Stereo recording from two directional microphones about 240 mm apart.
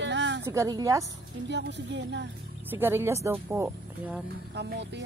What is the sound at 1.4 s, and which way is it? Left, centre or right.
Speech, right.